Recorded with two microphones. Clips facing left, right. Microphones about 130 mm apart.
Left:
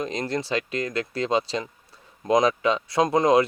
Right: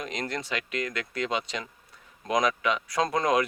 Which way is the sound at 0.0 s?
30° left (ahead or behind).